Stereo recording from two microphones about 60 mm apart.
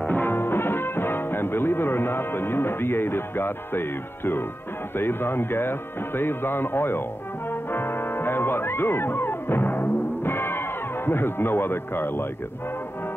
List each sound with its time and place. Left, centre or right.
0.0 s music: left
4.9 s speech: left